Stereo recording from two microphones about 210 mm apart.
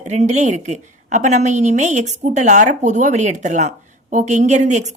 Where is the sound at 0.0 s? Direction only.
35° right (ahead or behind).